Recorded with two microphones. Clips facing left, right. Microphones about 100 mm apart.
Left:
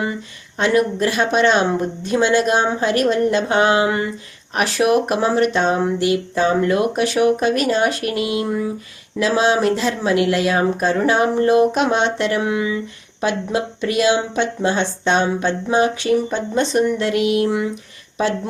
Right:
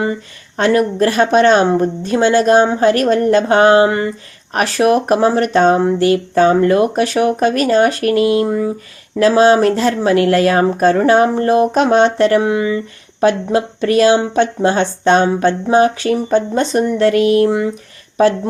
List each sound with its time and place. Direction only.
0.5 s speech: 40° right (ahead or behind)